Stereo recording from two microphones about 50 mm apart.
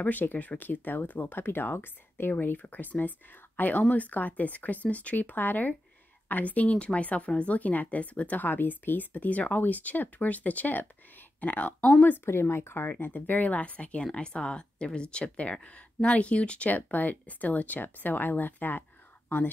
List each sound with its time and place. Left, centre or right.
0.0 s speech: left
2.6 s speech: left
8.5 s speech: left
12.3 s speech: left
13.0 s speech: left